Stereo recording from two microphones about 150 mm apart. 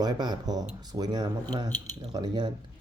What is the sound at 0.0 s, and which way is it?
Speech, 30° right (ahead or behind).